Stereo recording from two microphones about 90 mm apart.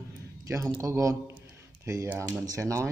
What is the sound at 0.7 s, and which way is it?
Speech, 35° right (ahead or behind).